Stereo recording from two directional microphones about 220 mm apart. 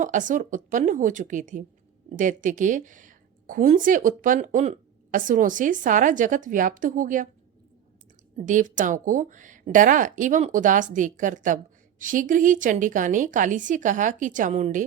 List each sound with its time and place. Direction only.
0.0 s speech: 35° right (ahead or behind)
8.4 s speech: 35° right (ahead or behind)